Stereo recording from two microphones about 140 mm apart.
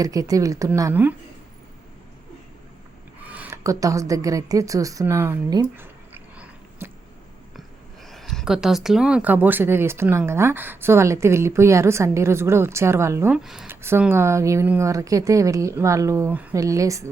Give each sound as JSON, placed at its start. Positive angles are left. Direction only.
{"t": 0.0, "sound": "a woman's voice", "side_deg": -25}
{"t": 3.2, "sound": "a woman's voice", "side_deg": -10}
{"t": 5.6, "sound": "a sound", "side_deg": -15}
{"t": 8.0, "sound": "speech", "side_deg": 0}
{"t": 13.3, "sound": "speech", "side_deg": -5}
{"t": 13.7, "sound": "a woman's voice", "side_deg": -15}
{"t": 16.6, "sound": "a woman's voice", "side_deg": -25}